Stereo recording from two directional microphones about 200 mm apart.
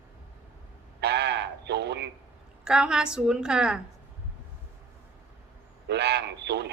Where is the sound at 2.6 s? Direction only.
5° right (ahead or behind).